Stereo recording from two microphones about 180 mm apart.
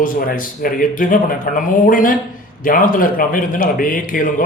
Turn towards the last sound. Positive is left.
turn(degrees=50)  # may be behind; listen again after turning